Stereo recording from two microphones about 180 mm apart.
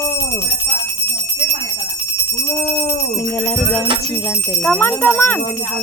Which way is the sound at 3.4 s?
10° left (ahead or behind).